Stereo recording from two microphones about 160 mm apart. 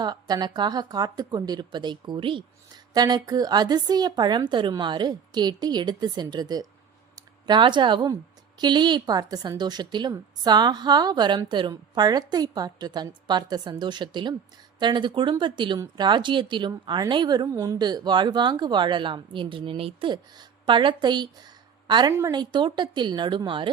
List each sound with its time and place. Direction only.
0.0 s a woman's voice: 25° right (ahead or behind)